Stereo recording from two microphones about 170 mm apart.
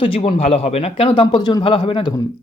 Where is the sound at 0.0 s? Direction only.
35° left (ahead or behind).